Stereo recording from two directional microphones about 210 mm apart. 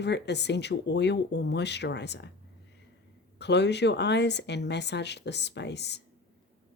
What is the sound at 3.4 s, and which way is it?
A woman's voice, 55° left (ahead or behind).